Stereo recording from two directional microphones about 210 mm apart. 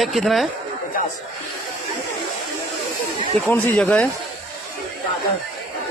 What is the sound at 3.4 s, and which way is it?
Speech, 5° left (ahead or behind).